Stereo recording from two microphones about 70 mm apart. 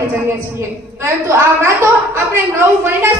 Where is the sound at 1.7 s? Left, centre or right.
Right.